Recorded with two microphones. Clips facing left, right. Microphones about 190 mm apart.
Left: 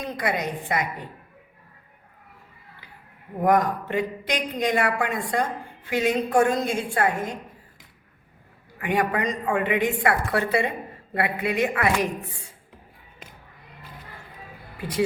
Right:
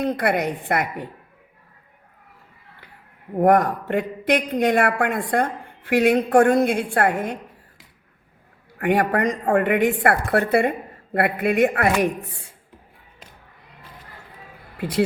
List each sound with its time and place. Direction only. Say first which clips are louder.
0.0 s speech: right 6 dB; 60° right (ahead or behind)
3.4 s speech: right 4 dB; 60° right (ahead or behind)
8.8 s speech: right 5 dB; 55° right (ahead or behind)